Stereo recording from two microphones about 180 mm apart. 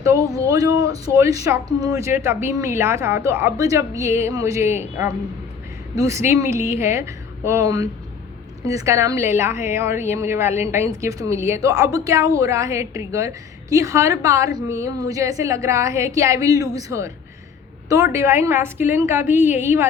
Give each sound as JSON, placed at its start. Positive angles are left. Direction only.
{"t": 0.0, "sound": "a woman's voice", "side_deg": -20}